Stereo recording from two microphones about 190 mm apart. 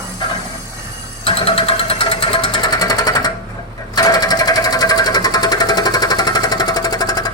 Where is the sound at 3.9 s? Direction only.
20° left (ahead or behind).